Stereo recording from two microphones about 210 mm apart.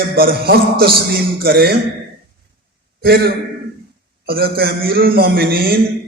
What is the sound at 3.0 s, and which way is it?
A man's voice, 50° right (ahead or behind).